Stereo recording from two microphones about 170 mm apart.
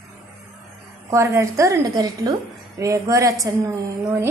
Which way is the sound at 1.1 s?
15° right (ahead or behind).